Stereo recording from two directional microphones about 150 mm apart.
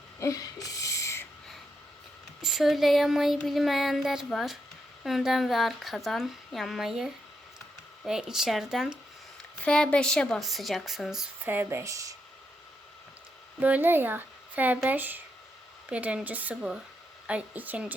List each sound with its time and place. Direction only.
0.2 s a sound: 20° left (ahead or behind)
2.4 s speech: centre (ahead or behind)
9.6 s speech: 5° left (ahead or behind)
11.4 s speech: 15° right (ahead or behind)
13.6 s a woman's voice: 10° right (ahead or behind)